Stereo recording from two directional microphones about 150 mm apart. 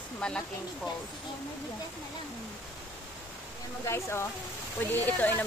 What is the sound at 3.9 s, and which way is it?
A woman's voice, 15° left (ahead or behind).